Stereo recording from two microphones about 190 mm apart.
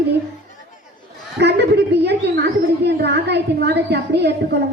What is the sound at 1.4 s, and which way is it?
A woman's voice, 65° right (ahead or behind).